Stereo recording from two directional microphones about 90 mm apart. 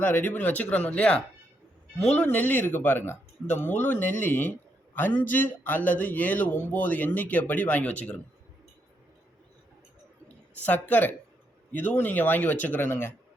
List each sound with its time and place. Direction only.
0.0 s speech: 20° left (ahead or behind)
10.6 s speech: 20° left (ahead or behind)